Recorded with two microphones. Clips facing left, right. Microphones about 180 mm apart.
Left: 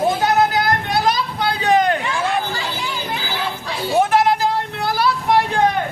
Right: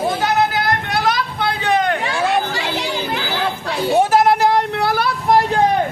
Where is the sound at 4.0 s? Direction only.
40° right (ahead or behind).